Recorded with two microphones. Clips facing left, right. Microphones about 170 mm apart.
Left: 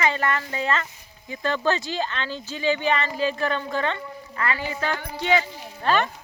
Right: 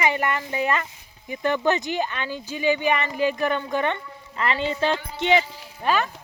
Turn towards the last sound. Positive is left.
turn(degrees=-15)  # may be behind; listen again after turning